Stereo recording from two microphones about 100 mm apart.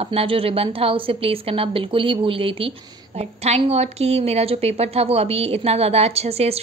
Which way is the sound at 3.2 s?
90° right.